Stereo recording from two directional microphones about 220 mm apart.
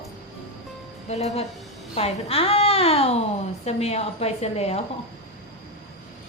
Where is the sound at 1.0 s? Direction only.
30° left (ahead or behind).